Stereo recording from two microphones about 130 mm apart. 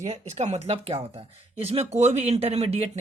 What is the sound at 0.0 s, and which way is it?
Speech, 55° right (ahead or behind).